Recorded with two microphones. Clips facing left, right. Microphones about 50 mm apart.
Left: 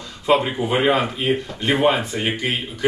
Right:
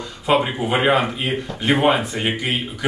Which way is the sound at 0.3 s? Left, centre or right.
Centre.